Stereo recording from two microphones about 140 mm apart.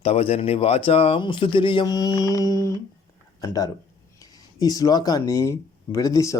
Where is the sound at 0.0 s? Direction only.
45° left (ahead or behind).